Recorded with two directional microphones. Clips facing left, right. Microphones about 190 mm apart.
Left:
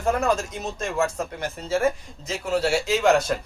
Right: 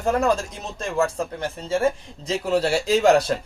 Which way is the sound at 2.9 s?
35° right (ahead or behind).